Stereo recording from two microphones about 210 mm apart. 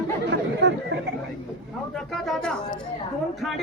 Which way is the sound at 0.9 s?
55° right (ahead or behind).